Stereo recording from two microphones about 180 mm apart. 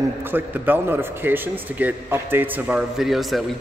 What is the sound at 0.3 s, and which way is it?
A man's voice, 10° right (ahead or behind).